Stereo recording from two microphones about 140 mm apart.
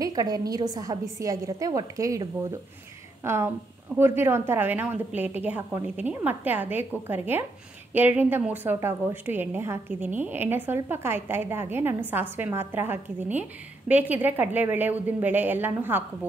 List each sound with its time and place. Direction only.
0.0 s a woman's voice: 25° right (ahead or behind)